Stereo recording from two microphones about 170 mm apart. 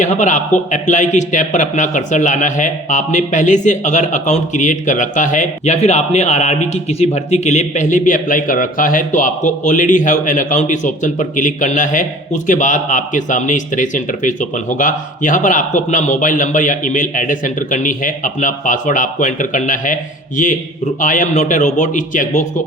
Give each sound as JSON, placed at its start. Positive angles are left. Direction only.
{"t": 0.0, "sound": "a man's voice", "side_deg": 45}